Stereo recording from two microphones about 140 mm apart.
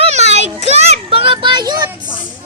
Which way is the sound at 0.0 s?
55° right (ahead or behind).